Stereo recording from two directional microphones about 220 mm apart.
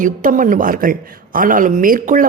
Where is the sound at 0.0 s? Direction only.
35° right (ahead or behind).